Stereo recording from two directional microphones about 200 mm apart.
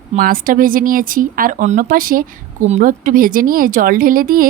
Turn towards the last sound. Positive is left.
turn(degrees=-45)  # may be behind; listen again after turning